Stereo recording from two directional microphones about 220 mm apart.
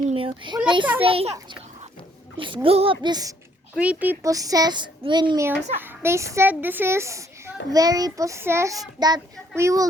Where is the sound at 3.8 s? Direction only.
5° right (ahead or behind).